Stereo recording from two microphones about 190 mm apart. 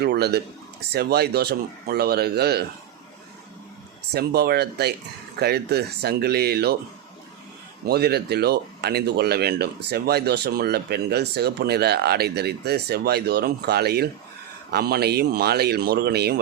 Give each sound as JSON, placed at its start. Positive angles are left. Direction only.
{"t": 0.0, "sound": "speech", "side_deg": -60}
{"t": 4.1, "sound": "speech", "side_deg": -55}
{"t": 7.9, "sound": "speech", "side_deg": -55}